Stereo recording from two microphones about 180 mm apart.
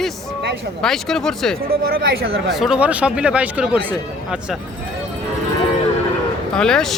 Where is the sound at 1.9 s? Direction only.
60° right (ahead or behind).